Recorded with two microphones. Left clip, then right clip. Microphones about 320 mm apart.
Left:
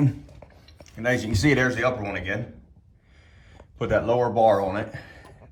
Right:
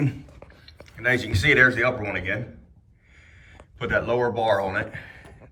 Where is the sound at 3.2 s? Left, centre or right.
Centre.